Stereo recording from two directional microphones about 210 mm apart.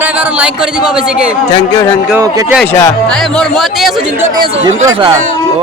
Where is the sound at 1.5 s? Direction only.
20° left (ahead or behind).